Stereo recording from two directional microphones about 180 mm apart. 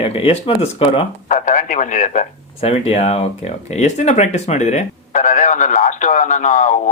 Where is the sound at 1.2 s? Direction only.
45° left (ahead or behind).